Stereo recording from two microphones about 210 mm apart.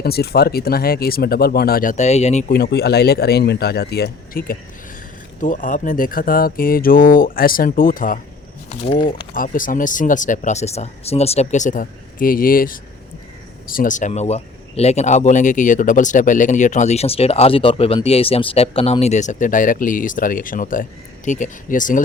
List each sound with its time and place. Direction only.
0.0 s speech: 50° left (ahead or behind); by 2.4 s 30° left (ahead or behind)
2.5 s speech: 50° left (ahead or behind)
9.3 s speech: 40° left (ahead or behind)